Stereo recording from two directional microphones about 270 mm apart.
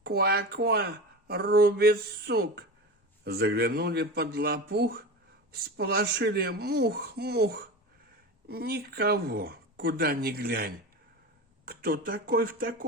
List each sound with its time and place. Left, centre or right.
0.0 s speech: right